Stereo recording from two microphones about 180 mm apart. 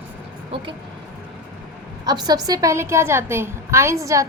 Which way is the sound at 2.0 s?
20° right (ahead or behind).